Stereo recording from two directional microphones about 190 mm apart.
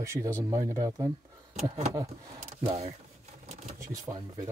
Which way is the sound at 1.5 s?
35° right (ahead or behind).